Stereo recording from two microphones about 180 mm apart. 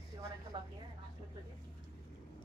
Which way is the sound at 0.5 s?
25° right (ahead or behind).